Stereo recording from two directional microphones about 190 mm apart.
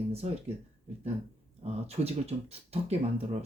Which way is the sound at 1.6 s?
35° right (ahead or behind).